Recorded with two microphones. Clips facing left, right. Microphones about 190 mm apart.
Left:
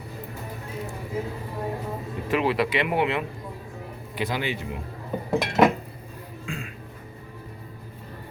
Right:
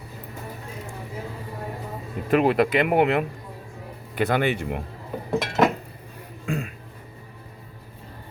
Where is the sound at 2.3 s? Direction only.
50° right (ahead or behind).